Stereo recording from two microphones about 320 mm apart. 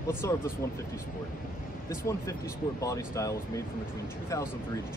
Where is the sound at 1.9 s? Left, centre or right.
Centre.